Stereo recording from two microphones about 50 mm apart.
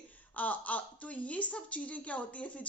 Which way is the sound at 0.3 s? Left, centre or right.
Left.